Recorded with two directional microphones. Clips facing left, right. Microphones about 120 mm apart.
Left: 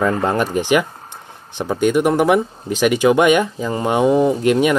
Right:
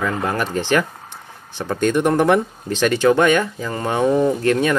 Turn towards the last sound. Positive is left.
turn(degrees=15)  # may be behind; listen again after turning